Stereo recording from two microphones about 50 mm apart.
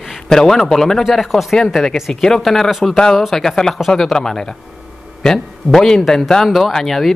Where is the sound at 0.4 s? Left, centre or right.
Centre.